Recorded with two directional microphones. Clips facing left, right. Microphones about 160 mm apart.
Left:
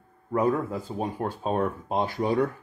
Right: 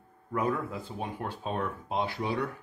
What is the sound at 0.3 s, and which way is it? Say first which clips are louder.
Speech: left 6 dB; 40° left (ahead or behind).